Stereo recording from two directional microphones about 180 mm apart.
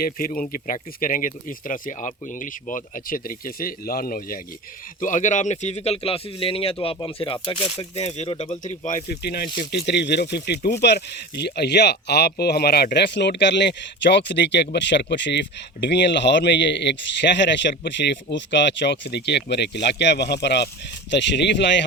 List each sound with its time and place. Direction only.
0.3 s speech: 45° left (ahead or behind)
8.6 s speech: 45° left (ahead or behind)
9.0 s speech: 60° left (ahead or behind)